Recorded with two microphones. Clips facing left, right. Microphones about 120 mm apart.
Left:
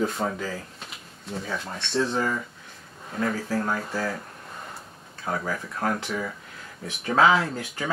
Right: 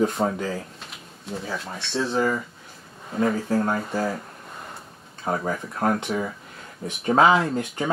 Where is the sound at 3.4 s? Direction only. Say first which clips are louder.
Right 4 dB; 25° right (ahead or behind).